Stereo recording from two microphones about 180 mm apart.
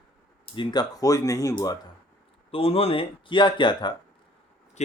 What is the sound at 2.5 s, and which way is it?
Speech, 30° left (ahead or behind).